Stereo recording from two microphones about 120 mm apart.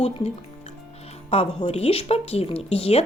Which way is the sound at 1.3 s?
60° left (ahead or behind).